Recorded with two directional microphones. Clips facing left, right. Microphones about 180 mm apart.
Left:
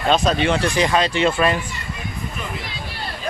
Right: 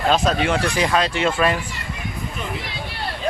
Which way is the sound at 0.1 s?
5° right (ahead or behind).